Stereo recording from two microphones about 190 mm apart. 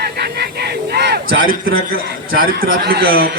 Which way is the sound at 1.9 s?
50° right (ahead or behind).